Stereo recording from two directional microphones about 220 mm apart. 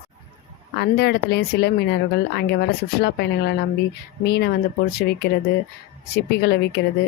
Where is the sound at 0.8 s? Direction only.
50° left (ahead or behind).